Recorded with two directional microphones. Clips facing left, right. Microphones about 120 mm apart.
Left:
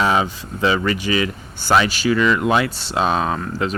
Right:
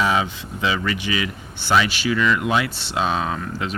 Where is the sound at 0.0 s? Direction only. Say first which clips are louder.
Left 2 dB; 40° left (ahead or behind).